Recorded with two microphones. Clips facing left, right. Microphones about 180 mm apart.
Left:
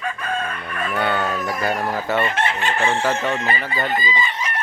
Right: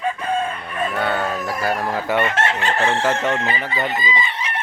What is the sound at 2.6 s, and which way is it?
Chicken, 35° right (ahead or behind).